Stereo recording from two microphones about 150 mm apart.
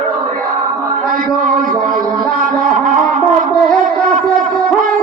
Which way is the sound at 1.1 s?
65° right (ahead or behind).